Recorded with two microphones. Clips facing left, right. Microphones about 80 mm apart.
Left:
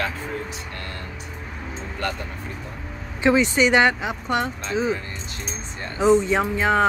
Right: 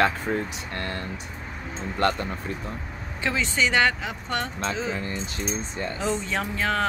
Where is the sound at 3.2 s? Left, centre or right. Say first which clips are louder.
Left 7 dB; centre.